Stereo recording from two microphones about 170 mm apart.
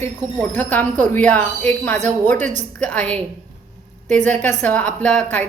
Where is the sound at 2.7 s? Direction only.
10° left (ahead or behind).